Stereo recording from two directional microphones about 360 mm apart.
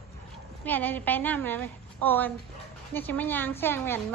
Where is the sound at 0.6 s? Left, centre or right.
Centre.